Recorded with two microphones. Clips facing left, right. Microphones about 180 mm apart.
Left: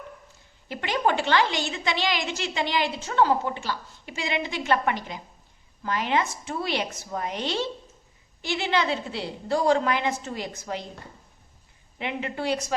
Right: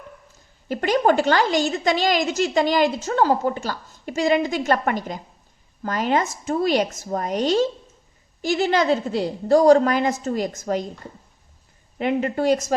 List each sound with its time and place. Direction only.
0.7 s a woman's voice: 40° right (ahead or behind)
11.9 s a woman's voice: 45° right (ahead or behind)